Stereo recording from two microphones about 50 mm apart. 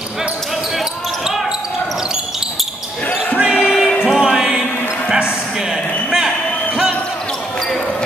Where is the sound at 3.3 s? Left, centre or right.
Right.